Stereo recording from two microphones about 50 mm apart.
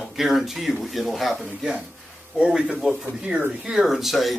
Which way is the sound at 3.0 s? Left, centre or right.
Right.